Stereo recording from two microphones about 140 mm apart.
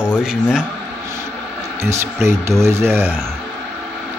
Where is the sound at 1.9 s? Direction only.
20° right (ahead or behind).